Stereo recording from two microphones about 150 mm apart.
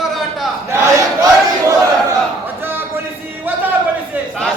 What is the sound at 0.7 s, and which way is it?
Battle cry, 20° right (ahead or behind).